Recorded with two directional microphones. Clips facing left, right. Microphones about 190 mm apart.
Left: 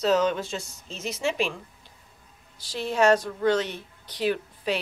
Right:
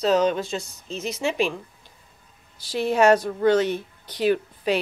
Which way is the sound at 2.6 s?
60° right (ahead or behind).